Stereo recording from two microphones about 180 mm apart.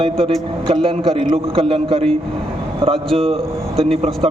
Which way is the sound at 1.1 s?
30° right (ahead or behind).